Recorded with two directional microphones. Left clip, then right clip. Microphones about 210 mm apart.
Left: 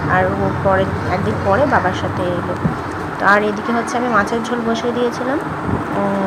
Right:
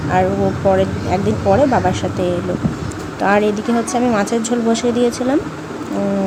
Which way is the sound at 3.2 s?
30° right (ahead or behind).